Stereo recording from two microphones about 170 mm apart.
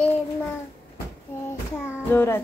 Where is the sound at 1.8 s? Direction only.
15° left (ahead or behind).